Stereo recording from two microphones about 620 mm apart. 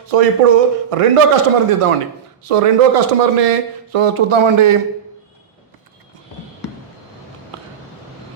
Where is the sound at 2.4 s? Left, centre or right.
Right.